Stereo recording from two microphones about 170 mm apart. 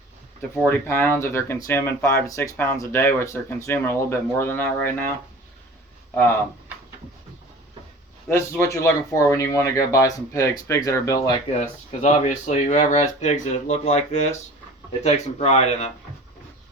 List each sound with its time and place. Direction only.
0.5 s speech: 15° left (ahead or behind)
8.3 s speech: 15° left (ahead or behind)
11.9 s speech: 40° left (ahead or behind)